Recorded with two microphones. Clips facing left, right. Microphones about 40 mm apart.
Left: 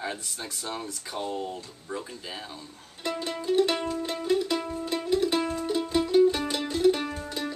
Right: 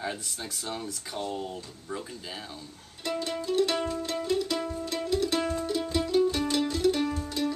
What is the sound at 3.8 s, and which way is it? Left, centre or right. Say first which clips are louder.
Music: left 2 dB; centre.